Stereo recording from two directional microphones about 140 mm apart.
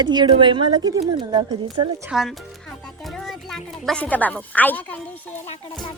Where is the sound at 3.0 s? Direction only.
Centre (ahead or behind).